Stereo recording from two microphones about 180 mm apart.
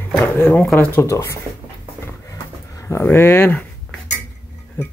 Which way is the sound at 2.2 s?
15° left (ahead or behind).